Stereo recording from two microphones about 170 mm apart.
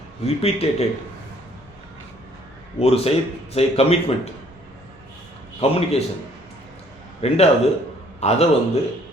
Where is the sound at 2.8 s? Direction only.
35° left (ahead or behind).